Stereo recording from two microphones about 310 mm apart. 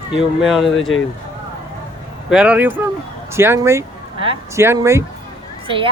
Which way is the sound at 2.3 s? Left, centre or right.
Centre.